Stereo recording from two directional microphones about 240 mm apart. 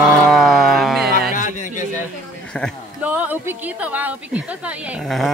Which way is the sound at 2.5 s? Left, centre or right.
Centre.